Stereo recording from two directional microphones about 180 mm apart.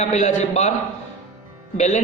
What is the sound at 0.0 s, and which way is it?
Speech, 40° left (ahead or behind).